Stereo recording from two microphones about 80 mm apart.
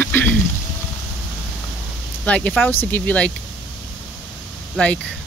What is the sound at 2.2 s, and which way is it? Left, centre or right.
Speech, centre.